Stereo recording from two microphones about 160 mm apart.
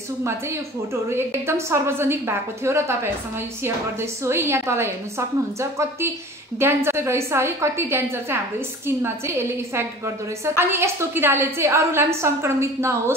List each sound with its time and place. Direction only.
0.2 s a woman's voice: 15° right (ahead or behind)